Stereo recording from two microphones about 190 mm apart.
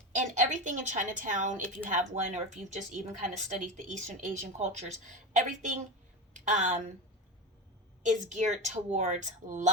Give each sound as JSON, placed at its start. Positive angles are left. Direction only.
{"t": 0.1, "sound": "a woman's voice", "side_deg": -40}
{"t": 8.0, "sound": "speech", "side_deg": -40}